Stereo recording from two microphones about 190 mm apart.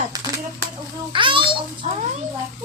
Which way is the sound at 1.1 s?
25° right (ahead or behind).